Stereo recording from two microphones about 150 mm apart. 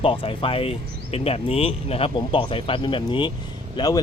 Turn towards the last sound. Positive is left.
turn(degrees=25)  # may be behind; listen again after turning